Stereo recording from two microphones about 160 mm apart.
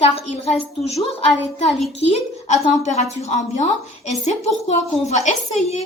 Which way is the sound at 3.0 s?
45° left (ahead or behind).